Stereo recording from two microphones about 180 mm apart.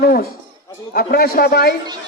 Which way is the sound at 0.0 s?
55° left (ahead or behind).